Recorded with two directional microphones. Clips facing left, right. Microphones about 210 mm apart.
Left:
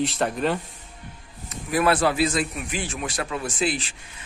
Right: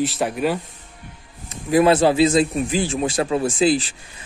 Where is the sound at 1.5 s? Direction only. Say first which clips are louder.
Right 6 dB; 25° right (ahead or behind).